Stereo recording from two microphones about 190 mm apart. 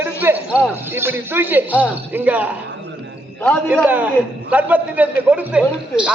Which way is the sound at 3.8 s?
10° right (ahead or behind).